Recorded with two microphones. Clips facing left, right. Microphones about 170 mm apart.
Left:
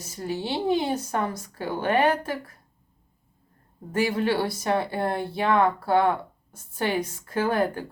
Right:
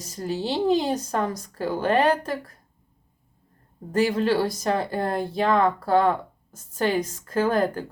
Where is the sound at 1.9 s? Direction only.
35° right (ahead or behind).